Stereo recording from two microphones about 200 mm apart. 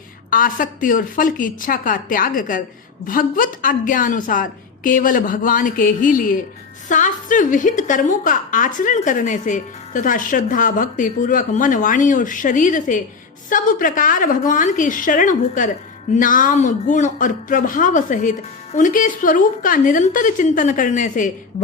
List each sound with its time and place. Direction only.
0.3 s a woman's voice: 45° left (ahead or behind)